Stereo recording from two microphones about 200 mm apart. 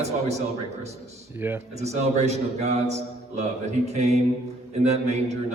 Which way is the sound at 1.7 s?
35° right (ahead or behind).